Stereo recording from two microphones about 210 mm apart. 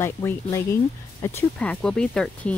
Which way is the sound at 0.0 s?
15° left (ahead or behind).